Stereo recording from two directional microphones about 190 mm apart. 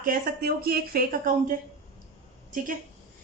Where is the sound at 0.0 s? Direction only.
50° right (ahead or behind).